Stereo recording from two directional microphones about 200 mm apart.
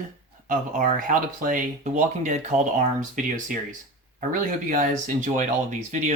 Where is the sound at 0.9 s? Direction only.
40° right (ahead or behind).